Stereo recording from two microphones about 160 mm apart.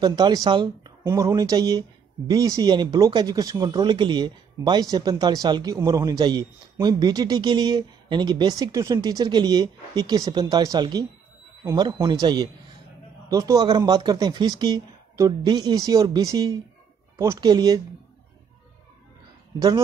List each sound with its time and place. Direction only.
0.0 s speech: 25° right (ahead or behind)